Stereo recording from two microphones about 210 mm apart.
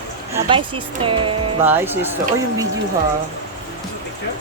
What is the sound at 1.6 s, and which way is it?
Speech, 10° right (ahead or behind).